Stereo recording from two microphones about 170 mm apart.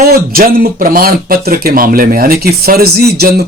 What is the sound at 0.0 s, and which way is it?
Speech, 60° right (ahead or behind).